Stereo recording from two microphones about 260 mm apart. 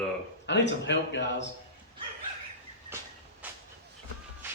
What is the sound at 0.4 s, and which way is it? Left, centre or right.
Speech, left.